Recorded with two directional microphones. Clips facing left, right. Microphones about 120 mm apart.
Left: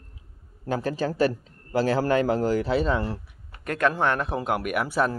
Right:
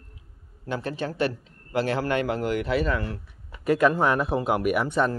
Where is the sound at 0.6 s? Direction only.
35° left (ahead or behind).